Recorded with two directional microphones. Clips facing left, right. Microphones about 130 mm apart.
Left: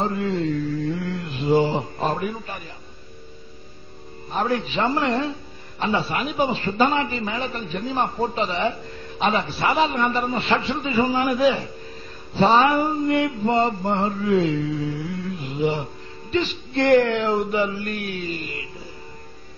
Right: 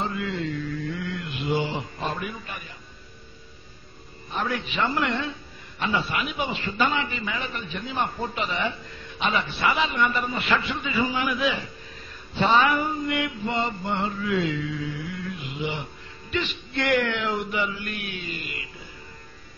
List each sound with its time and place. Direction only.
0.0 s mantra: 35° left (ahead or behind)
4.4 s mantra: 35° left (ahead or behind)